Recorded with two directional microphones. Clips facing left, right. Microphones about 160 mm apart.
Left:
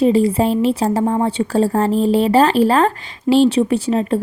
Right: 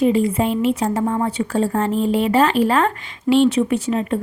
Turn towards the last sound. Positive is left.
turn(degrees=30)  # may be behind; listen again after turning